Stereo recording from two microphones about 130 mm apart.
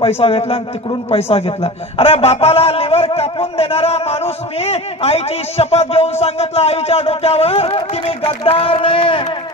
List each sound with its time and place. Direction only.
0.0 s a man's voice: 45° left (ahead or behind)